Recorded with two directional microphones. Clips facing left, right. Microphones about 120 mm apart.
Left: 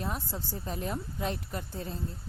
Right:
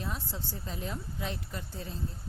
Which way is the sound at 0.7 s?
50° left (ahead or behind).